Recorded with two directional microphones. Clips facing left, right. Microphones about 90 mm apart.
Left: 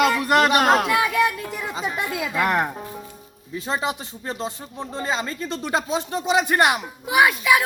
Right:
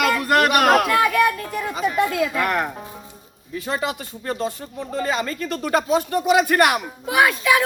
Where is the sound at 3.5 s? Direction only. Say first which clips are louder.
Even; 25° left (ahead or behind).